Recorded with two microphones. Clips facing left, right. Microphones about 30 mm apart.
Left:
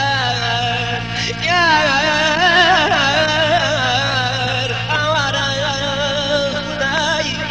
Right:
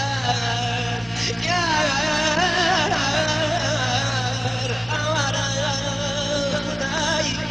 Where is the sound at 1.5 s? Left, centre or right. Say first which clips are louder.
Left 8 dB; left.